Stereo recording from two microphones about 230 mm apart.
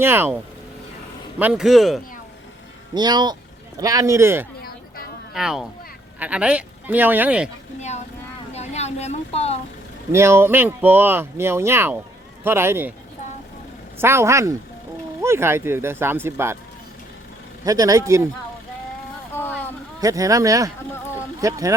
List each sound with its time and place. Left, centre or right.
0.0 s speech: centre
1.4 s speech: centre
2.9 s speech: centre
7.8 s speech: left
8.5 s vehicle: left
10.1 s speech: centre
14.0 s speech: centre
17.7 s speech: centre
19.4 s a sound: centre
20.0 s speech: centre